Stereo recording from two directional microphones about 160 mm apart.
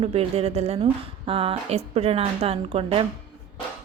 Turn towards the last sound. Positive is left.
turn(degrees=-35)  # may be behind; listen again after turning